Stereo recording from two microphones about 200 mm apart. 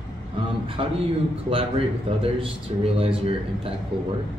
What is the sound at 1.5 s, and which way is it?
A man's voice, 30° right (ahead or behind).